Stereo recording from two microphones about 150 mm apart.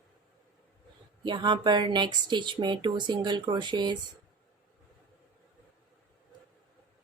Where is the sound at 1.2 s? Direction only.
30° right (ahead or behind).